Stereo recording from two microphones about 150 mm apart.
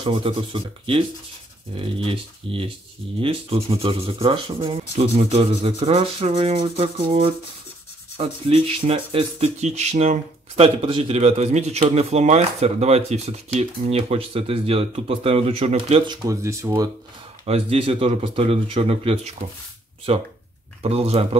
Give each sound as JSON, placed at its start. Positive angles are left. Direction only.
{"t": 0.0, "sound": "rub", "side_deg": -35}
{"t": 5.9, "sound": "speech", "side_deg": -45}
{"t": 6.8, "sound": "rub", "side_deg": -40}
{"t": 8.2, "sound": "speech", "side_deg": -40}
{"t": 16.3, "sound": "speech", "side_deg": -20}
{"t": 17.5, "sound": "rub", "side_deg": -40}